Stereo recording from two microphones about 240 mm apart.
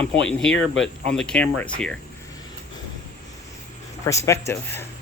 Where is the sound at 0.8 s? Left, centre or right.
Centre.